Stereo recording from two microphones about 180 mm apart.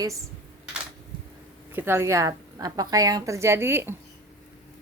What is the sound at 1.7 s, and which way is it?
A woman's voice, 10° right (ahead or behind).